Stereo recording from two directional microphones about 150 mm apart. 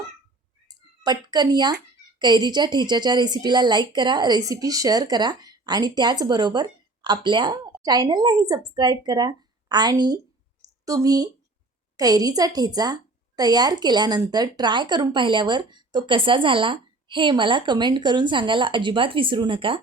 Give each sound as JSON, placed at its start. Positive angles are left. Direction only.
{"t": 0.7, "sound": "a woman's voice", "side_deg": -25}